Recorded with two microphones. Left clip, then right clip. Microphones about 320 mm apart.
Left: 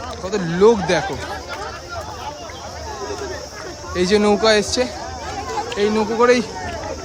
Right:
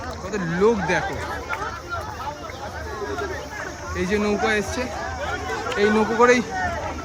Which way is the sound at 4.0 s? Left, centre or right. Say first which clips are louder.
Left 7 dB; centre.